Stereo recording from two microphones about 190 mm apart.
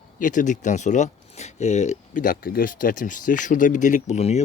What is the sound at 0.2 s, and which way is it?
Speech, 40° left (ahead or behind).